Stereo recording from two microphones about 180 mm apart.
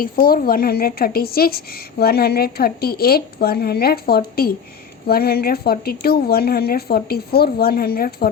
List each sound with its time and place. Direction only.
0.0 s speech: 55° left (ahead or behind)